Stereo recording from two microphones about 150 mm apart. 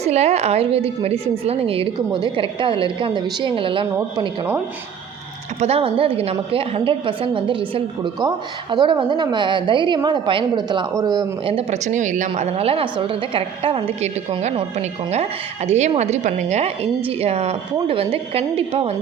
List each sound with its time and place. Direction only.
0.0 s a woman's voice: 45° right (ahead or behind)
5.5 s a woman's voice: 40° right (ahead or behind); by 11.3 s 25° right (ahead or behind)
11.4 s a woman's voice: 40° right (ahead or behind)
11.9 s a woman's voice: 55° right (ahead or behind); by 18.9 s 40° right (ahead or behind)